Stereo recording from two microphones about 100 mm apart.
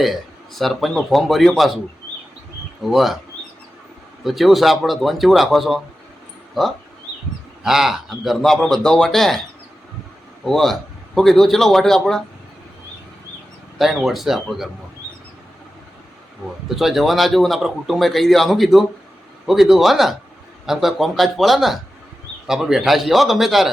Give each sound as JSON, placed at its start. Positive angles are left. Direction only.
{"t": 0.0, "sound": "a man's voice", "side_deg": 0}
{"t": 2.8, "sound": "a man's voice", "side_deg": 0}
{"t": 4.2, "sound": "a man's voice", "side_deg": 0}
{"t": 10.4, "sound": "a man's voice", "side_deg": 5}
{"t": 13.7, "sound": "a man's voice", "side_deg": 0}
{"t": 16.6, "sound": "a man's voice", "side_deg": 0}